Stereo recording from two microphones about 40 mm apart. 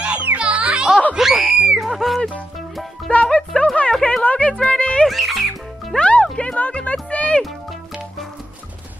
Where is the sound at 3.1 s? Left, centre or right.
Left.